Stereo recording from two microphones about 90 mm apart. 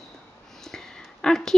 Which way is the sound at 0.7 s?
5° left (ahead or behind).